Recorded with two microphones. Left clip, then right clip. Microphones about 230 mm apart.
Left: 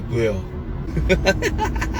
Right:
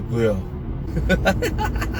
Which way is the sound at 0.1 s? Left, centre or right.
Centre.